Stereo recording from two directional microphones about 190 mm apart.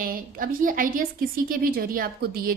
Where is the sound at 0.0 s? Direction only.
50° right (ahead or behind).